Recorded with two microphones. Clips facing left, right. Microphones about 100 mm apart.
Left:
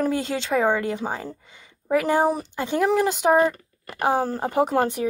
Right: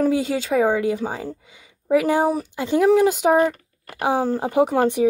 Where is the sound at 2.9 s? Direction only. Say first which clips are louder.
Right 5 dB; 50° left (ahead or behind).